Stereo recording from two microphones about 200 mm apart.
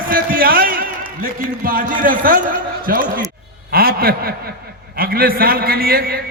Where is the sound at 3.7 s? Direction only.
50° right (ahead or behind).